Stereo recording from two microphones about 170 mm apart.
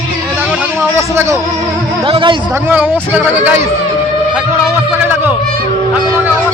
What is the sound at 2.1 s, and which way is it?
Speech, 30° right (ahead or behind).